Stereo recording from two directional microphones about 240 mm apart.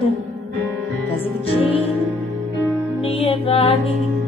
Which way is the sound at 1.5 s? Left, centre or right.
Left.